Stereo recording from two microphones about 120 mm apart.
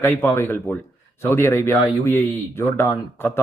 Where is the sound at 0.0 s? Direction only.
15° left (ahead or behind).